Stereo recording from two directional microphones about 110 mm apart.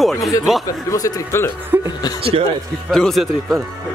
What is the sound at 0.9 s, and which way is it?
Speech, 25° left (ahead or behind).